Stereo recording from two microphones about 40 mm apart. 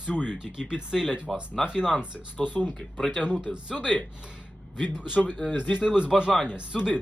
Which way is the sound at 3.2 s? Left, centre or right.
Centre.